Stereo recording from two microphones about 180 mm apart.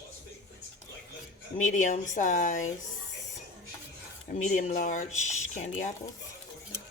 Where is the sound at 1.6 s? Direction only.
45° left (ahead or behind).